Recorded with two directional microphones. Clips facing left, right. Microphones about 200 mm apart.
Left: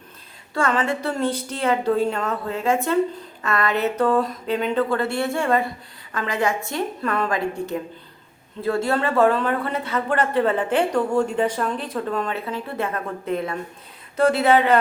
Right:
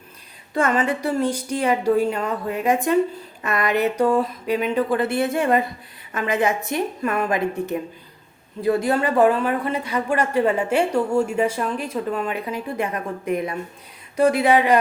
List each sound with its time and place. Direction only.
0.5 s a woman's voice: 20° right (ahead or behind)